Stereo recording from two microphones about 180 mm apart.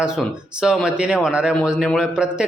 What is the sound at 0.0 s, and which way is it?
A man's voice, 5° right (ahead or behind).